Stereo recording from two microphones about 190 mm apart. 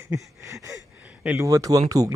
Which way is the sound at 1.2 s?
15° right (ahead or behind).